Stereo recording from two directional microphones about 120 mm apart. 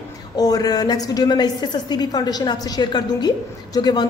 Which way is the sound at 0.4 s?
30° left (ahead or behind).